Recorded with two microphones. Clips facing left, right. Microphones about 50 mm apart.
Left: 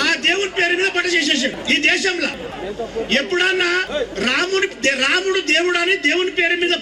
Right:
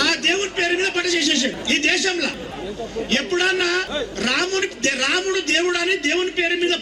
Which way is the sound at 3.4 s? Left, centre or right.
Left.